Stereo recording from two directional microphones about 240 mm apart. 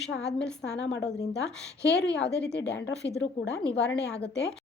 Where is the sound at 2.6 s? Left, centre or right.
Left.